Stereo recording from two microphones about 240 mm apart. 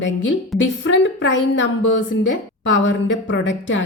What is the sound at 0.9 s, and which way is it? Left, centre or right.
A woman's voice, left.